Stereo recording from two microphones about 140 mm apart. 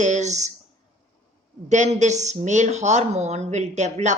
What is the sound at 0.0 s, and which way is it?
Speech, 55° right (ahead or behind).